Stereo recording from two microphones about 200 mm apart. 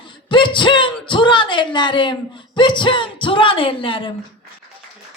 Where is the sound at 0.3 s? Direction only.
25° left (ahead or behind).